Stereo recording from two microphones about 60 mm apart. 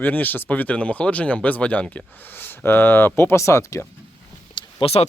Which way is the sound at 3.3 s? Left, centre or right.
Left.